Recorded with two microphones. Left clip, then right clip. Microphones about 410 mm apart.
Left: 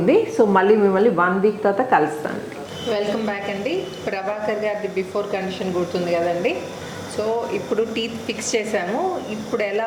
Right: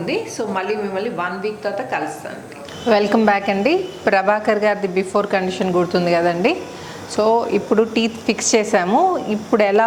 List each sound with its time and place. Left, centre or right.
0.0 s a woman's voice: left
2.9 s a woman's voice: right